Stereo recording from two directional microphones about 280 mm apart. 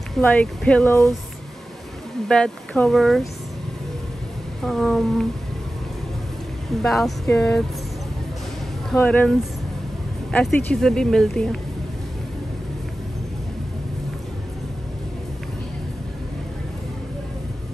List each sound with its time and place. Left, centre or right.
0.1 s speech: centre
2.2 s speech: centre
4.6 s speech: centre
6.8 s speech: centre
8.9 s speech: centre
10.3 s speech: centre